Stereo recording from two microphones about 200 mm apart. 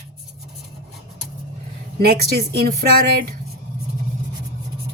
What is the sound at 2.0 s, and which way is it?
Speech, 50° right (ahead or behind).